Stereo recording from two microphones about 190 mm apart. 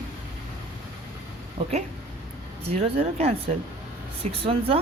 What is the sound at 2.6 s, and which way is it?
Speech, 30° right (ahead or behind).